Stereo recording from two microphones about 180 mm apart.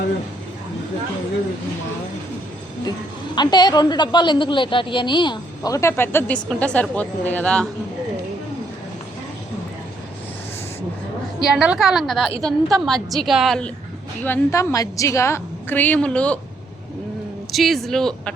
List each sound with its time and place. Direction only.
3.3 s a woman's voice: 25° left (ahead or behind); by 7.7 s 5° left (ahead or behind)
11.5 s a woman's voice: 5° right (ahead or behind)
14.3 s a woman's voice: 15° left (ahead or behind)
17.5 s a woman's voice: centre (ahead or behind)